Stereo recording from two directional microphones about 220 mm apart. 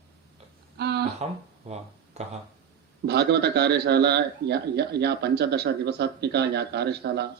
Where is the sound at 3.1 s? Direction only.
50° right (ahead or behind).